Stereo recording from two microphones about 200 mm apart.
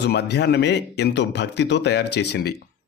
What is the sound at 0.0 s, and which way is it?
A man's voice, 60° left (ahead or behind).